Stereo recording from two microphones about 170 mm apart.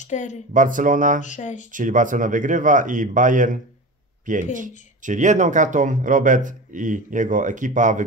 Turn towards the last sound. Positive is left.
turn(degrees=-50)  # may be behind; listen again after turning